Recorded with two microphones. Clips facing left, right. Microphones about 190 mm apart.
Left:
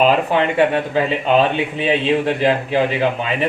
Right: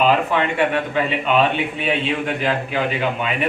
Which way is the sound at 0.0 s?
35° left (ahead or behind).